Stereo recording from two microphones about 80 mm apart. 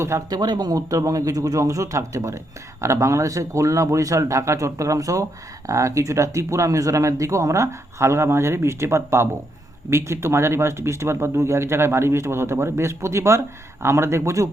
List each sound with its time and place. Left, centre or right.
0.3 s speech: right